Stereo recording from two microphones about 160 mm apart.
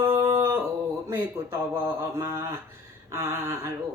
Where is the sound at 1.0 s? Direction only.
15° right (ahead or behind).